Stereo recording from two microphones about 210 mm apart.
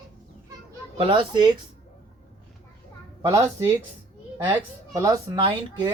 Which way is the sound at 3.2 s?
15° right (ahead or behind).